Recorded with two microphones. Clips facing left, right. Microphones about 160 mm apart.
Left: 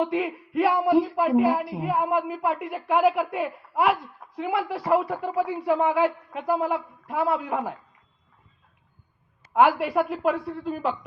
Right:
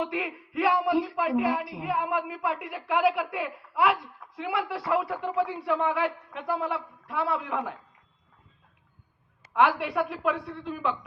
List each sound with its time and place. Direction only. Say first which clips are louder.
0.0 s speech: left 6 dB; 25° left (ahead or behind)
9.6 s speech: left 4 dB; 25° left (ahead or behind)